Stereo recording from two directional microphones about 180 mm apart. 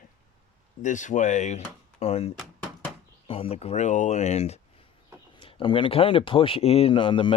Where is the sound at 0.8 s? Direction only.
45° left (ahead or behind).